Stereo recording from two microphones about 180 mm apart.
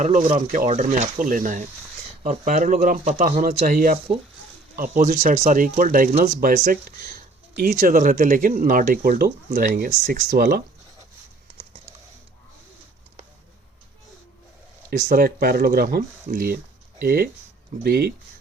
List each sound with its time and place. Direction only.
0.0 s speech: 40° right (ahead or behind)
6.1 s speech: 40° right (ahead or behind)
6.4 s speech: 55° right (ahead or behind)
14.8 s speech: 55° right (ahead or behind)